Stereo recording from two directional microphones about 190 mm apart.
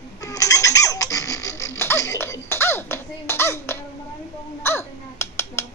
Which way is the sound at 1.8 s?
15° left (ahead or behind).